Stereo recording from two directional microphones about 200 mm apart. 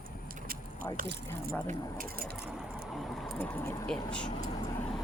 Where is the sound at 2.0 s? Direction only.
50° right (ahead or behind).